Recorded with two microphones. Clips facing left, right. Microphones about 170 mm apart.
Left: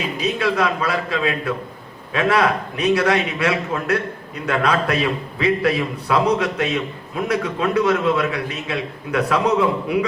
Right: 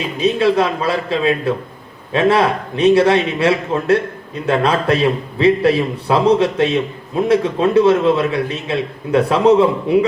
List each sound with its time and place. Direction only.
0.2 s a man's voice: 30° right (ahead or behind)